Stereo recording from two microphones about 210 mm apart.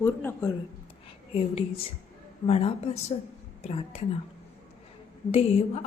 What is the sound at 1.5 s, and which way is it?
A woman's voice, 25° left (ahead or behind).